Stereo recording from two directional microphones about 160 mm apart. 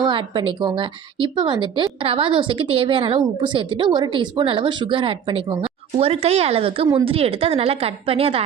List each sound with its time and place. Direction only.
0.0 s a woman's voice: 30° right (ahead or behind)